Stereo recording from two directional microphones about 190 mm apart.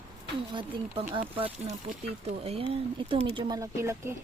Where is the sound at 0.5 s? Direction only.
25° right (ahead or behind).